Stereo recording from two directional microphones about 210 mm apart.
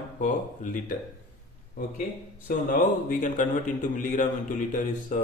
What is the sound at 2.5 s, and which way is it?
Speech, 40° left (ahead or behind).